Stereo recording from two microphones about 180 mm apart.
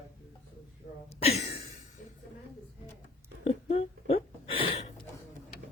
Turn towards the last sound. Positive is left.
turn(degrees=35)  # may be behind; listen again after turning